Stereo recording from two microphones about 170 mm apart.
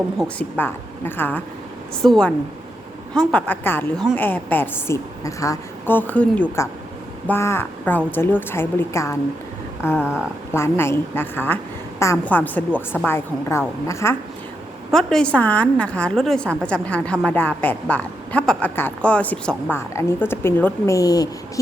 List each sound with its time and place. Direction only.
0.3 s a woman's voice: 10° left (ahead or behind)
10.0 s speech: 5° right (ahead or behind)
10.5 s a woman's voice: 15° left (ahead or behind)
14.9 s a woman's voice: 5° left (ahead or behind); by 21.6 s 20° left (ahead or behind)